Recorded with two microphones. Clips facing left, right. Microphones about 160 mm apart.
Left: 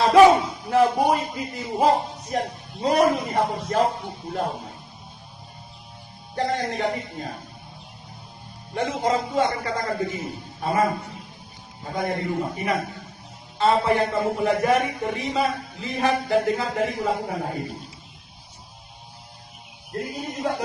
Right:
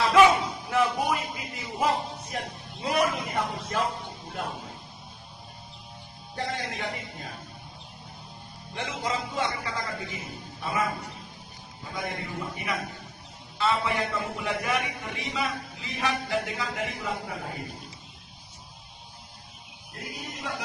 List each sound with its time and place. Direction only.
0.0 s a sound: 35° left (ahead or behind)
0.7 s a man's voice: 35° left (ahead or behind)
6.3 s a man's voice: 45° left (ahead or behind)
8.7 s a man's voice: 45° left (ahead or behind)
11.9 s a man's voice: 45° left (ahead or behind)
19.9 s a man's voice: 40° left (ahead or behind)